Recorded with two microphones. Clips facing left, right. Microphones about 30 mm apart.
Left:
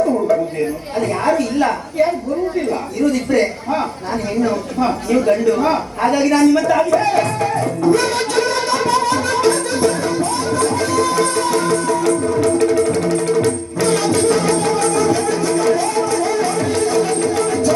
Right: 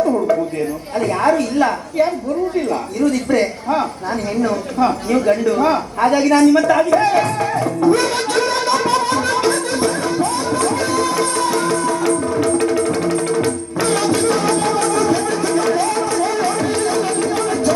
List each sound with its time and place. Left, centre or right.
0.9 s a woman's voice: centre
3.0 s a woman's voice: centre
4.4 s a woman's voice: centre
8.0 s music: centre
9.3 s music: centre